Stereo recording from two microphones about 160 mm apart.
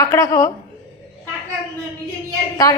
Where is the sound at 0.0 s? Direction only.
20° left (ahead or behind).